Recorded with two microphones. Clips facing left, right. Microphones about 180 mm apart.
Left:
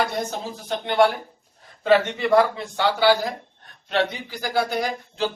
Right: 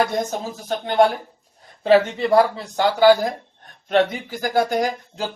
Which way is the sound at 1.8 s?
30° right (ahead or behind).